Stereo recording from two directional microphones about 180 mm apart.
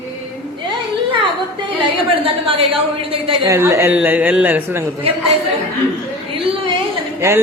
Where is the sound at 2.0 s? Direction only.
30° right (ahead or behind).